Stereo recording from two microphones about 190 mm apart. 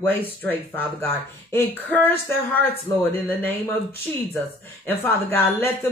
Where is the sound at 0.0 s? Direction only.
10° left (ahead or behind).